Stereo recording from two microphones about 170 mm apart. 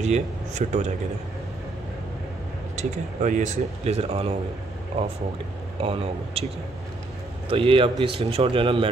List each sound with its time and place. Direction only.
0.0 s speech: 45° right (ahead or behind)
2.7 s speech: 45° right (ahead or behind)
5.8 s speech: 35° right (ahead or behind)
7.4 s speech: 30° right (ahead or behind)